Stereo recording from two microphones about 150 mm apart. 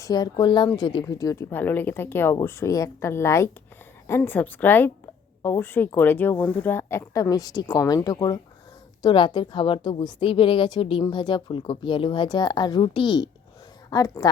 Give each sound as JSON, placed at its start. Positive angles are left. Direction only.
{"t": 0.0, "sound": "speech", "side_deg": 25}